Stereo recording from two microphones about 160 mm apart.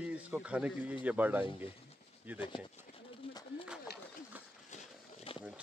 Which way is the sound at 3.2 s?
30° left (ahead or behind).